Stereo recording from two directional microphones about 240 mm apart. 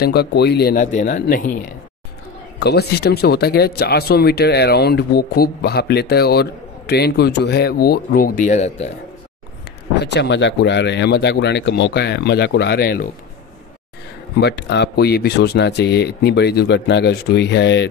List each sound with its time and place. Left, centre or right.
0.0 s speech: left
2.6 s speech: left
9.9 s speech: left
14.4 s speech: left